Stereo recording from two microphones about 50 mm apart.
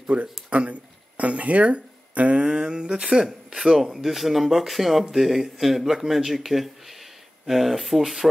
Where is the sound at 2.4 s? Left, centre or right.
Centre.